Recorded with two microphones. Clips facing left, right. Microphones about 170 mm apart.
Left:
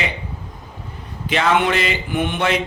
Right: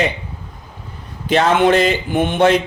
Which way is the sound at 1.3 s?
40° right (ahead or behind).